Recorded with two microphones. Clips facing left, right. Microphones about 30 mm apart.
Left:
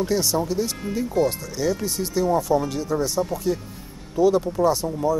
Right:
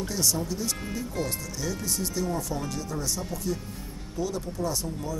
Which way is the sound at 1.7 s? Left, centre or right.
Left.